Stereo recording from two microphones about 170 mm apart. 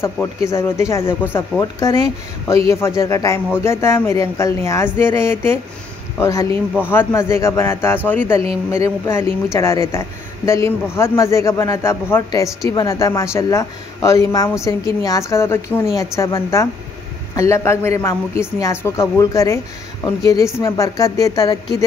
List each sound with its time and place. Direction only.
0.0 s a woman's voice: 15° left (ahead or behind)